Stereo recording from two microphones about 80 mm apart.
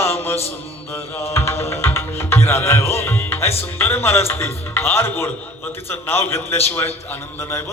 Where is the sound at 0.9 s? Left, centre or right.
Left.